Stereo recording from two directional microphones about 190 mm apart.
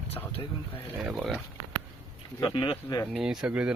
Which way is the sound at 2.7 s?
15° left (ahead or behind).